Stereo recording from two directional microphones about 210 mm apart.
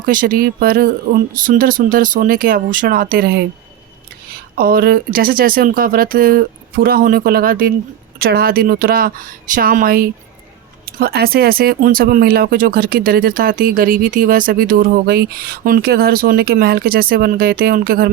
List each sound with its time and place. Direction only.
0.0 s speech: 40° right (ahead or behind)
4.5 s speech: 45° right (ahead or behind)